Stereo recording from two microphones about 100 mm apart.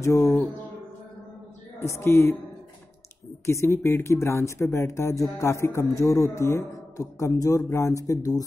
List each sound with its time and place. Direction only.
0.0 s a man's voice: 30° left (ahead or behind)
1.8 s speech: 25° left (ahead or behind)
3.4 s a man's voice: 25° left (ahead or behind)